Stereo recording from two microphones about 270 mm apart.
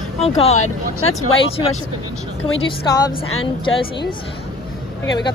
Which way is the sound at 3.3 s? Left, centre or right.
Left.